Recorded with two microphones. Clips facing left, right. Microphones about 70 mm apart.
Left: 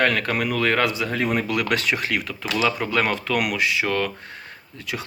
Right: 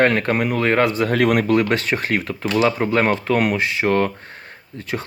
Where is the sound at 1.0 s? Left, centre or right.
Right.